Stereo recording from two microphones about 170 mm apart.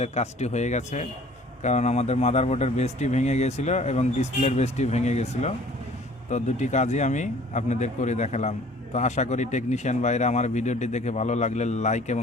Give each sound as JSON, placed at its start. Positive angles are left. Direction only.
{"t": 0.0, "sound": "a man's voice", "side_deg": 40}